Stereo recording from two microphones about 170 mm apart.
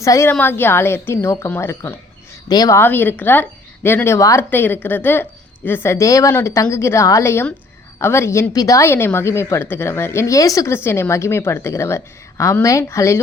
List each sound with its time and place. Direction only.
0.0 s speech: 15° left (ahead or behind)